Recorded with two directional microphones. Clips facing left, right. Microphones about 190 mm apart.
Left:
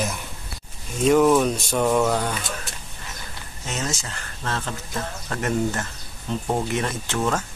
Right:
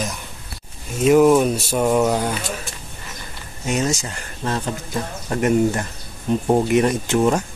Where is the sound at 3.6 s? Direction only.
15° right (ahead or behind).